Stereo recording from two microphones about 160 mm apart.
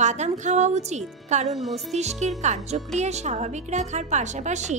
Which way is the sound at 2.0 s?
45° right (ahead or behind).